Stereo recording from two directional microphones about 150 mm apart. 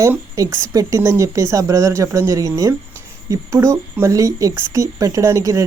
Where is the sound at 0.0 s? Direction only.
20° right (ahead or behind).